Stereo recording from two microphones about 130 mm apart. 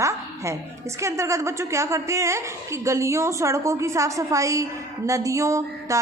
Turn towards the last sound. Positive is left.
turn(degrees=-25)  # may be behind; listen again after turning